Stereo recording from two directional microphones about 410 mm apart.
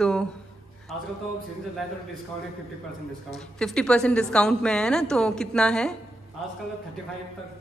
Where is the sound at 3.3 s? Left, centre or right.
Centre.